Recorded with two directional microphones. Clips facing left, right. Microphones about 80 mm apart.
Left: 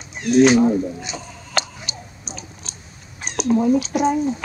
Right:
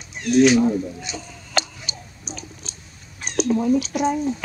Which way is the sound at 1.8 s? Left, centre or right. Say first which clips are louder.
Left 2 dB; left.